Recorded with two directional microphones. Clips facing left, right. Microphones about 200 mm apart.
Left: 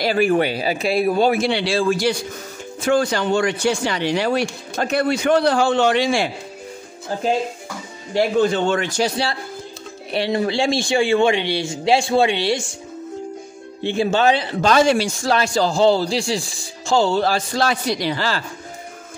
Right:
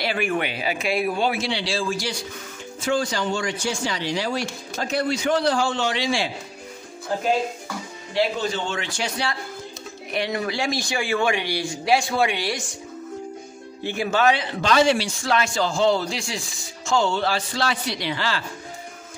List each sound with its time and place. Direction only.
0.0 s a man's voice: 35° left (ahead or behind); by 6.3 s 55° left (ahead or behind)
8.1 s a man's voice: 50° left (ahead or behind); by 12.7 s 25° left (ahead or behind)
13.8 s a man's voice: 25° left (ahead or behind)